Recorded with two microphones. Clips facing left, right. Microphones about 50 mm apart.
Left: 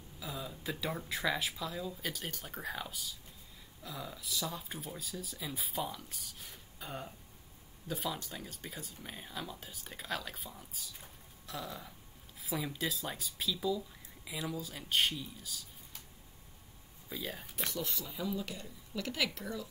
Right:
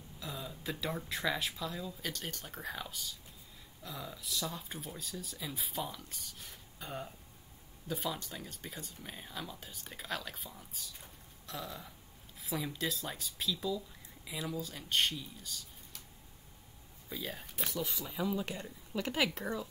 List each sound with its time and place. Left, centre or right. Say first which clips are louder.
0.2 s speech: left 1 dB; centre
17.1 s speech: even; centre
18.0 s speech: right 3 dB; centre
18.5 s speech: right 3 dB; right